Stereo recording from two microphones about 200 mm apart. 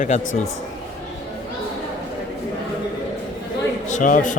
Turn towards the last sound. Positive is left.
turn(degrees=40)  # may be behind; listen again after turning